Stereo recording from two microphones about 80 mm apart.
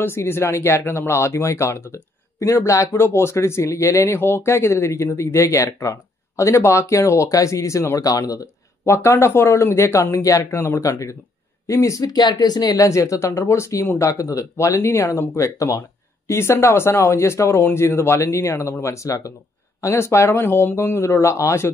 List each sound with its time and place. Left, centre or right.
0.0 s speech: left
8.1 s speech: left
8.8 s speech: left
12.8 s speech: left